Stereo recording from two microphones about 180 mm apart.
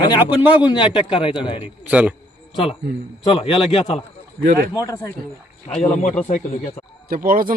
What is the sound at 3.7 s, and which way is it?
Speech, 30° left (ahead or behind).